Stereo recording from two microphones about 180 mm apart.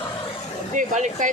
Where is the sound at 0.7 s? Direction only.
45° right (ahead or behind).